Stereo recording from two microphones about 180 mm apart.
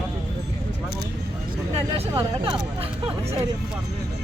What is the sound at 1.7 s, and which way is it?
Hubbub, 30° right (ahead or behind).